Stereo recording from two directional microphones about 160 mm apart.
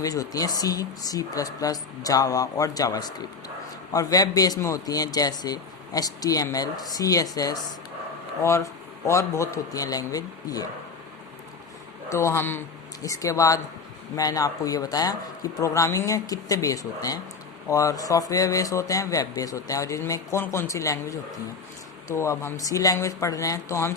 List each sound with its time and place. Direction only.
0.0 s a man's voice: 20° left (ahead or behind)
12.1 s a man's voice: 15° left (ahead or behind)